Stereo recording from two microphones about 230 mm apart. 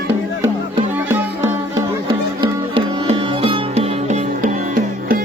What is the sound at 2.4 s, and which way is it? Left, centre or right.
Music, right.